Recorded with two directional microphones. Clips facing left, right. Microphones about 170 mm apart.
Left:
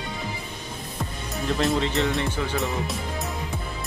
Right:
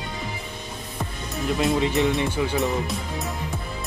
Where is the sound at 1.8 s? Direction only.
20° right (ahead or behind).